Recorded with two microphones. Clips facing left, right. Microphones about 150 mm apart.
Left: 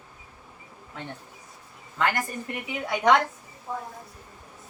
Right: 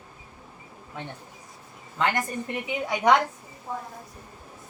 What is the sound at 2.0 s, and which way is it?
A woman's voice, 20° right (ahead or behind).